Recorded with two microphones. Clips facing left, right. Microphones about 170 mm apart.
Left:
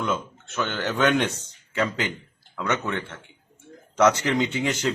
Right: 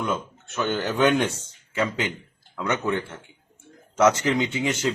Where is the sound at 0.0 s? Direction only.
15° right (ahead or behind).